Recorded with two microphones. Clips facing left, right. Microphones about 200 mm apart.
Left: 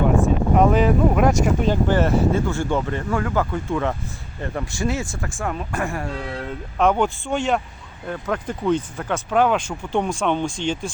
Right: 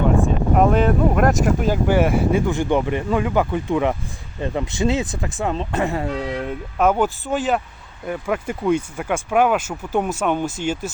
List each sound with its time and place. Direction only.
0.2 s speech: centre (ahead or behind); by 6.5 s 20° right (ahead or behind)
6.7 s speech: 5° right (ahead or behind)